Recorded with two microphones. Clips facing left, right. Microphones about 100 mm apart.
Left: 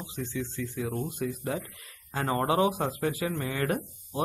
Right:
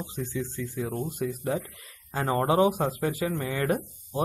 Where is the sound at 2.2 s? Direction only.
25° right (ahead or behind).